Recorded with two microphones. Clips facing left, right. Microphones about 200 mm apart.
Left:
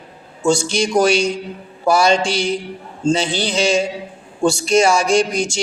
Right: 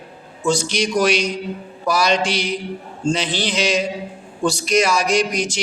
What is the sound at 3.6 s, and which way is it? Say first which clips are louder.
A man's voice: left 4 dB; 30° left (ahead or behind).